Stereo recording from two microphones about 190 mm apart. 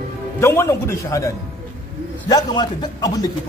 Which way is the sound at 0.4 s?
15° left (ahead or behind).